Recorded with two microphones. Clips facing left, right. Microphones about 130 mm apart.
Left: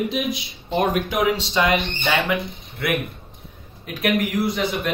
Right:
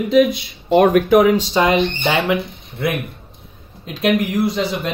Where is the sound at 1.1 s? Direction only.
50° right (ahead or behind); by 2.8 s 30° right (ahead or behind).